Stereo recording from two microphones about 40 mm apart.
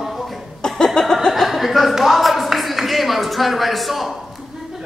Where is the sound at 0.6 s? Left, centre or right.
Centre.